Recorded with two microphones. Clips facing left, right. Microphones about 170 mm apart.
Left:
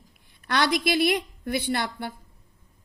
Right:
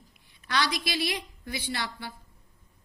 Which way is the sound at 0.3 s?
55° left (ahead or behind).